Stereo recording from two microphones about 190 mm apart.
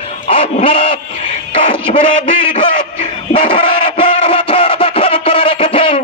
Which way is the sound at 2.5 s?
30° left (ahead or behind).